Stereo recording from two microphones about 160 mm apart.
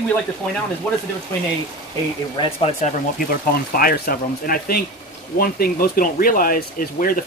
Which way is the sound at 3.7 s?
65° left (ahead or behind).